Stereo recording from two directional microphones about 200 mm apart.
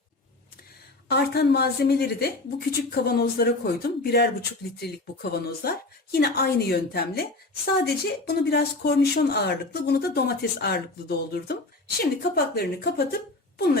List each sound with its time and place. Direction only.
1.0 s speech: 55° left (ahead or behind)